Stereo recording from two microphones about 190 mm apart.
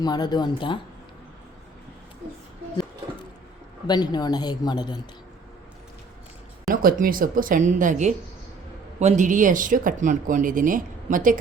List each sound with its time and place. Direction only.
0.0 s a woman's voice: 20° left (ahead or behind)
3.8 s a woman's voice: 20° left (ahead or behind)
6.8 s speech: 45° right (ahead or behind)